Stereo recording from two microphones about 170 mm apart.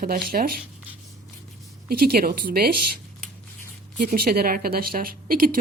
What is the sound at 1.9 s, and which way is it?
A woman's voice, 65° right (ahead or behind).